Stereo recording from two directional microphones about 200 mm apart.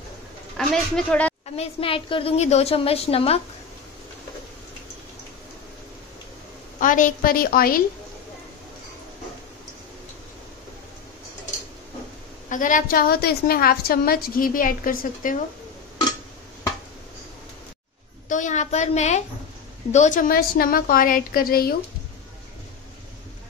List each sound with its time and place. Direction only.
0.6 s speech: 5° left (ahead or behind)
1.6 s a woman's voice: 25° left (ahead or behind)
6.8 s a woman's voice: 40° left (ahead or behind)
12.4 s a woman's voice: 40° left (ahead or behind)
18.3 s a woman's voice: 35° left (ahead or behind)